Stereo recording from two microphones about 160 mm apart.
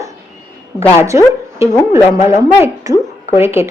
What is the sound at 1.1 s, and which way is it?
A woman's voice, 15° right (ahead or behind).